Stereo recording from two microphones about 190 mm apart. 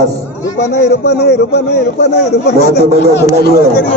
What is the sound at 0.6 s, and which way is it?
A man's voice, 60° left (ahead or behind).